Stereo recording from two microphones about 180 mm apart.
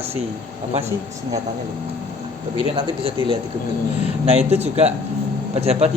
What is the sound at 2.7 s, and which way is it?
Speech, 25° right (ahead or behind).